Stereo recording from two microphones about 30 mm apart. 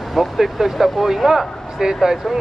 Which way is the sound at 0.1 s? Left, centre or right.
Centre.